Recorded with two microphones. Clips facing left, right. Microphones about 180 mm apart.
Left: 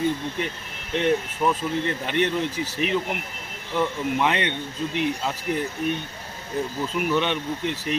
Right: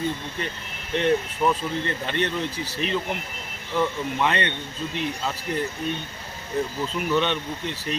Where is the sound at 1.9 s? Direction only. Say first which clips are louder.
Left 3 dB; 15° left (ahead or behind).